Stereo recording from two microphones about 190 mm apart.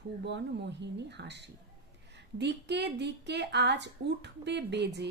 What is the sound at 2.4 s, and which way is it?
Speech, 65° right (ahead or behind).